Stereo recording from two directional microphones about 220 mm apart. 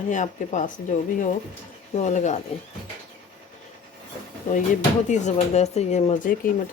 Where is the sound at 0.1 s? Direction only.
35° left (ahead or behind).